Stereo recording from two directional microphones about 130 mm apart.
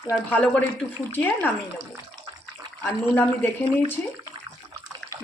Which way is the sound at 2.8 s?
15° left (ahead or behind).